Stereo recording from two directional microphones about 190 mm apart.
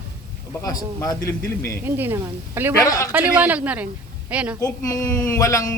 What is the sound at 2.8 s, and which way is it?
Speech, 15° left (ahead or behind).